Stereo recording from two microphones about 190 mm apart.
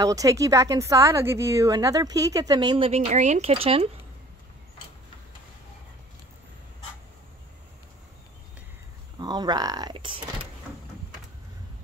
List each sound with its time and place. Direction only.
0.0 s a woman's voice: 20° right (ahead or behind)
9.2 s speech: 20° right (ahead or behind)